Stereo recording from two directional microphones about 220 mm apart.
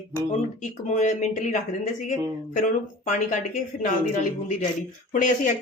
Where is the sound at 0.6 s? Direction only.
35° left (ahead or behind).